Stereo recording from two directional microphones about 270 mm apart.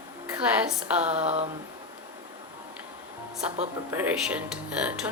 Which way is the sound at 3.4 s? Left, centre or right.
Centre.